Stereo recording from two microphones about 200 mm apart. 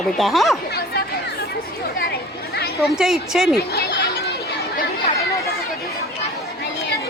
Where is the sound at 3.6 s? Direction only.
55° left (ahead or behind).